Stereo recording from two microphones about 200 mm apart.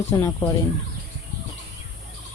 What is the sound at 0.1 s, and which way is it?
Speech, 15° left (ahead or behind).